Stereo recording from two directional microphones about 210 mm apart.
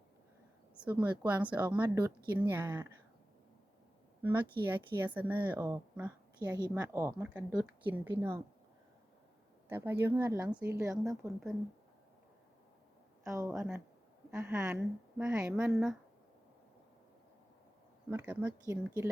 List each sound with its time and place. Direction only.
0.8 s a woman's voice: 5° right (ahead or behind)
4.2 s a woman's voice: 10° right (ahead or behind)
9.6 s a woman's voice: 10° right (ahead or behind)
13.2 s a woman's voice: 15° right (ahead or behind)
18.1 s a woman's voice: 10° right (ahead or behind)